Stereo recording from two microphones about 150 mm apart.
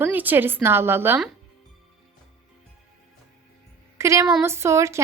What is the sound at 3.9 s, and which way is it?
A woman's voice, 20° right (ahead or behind).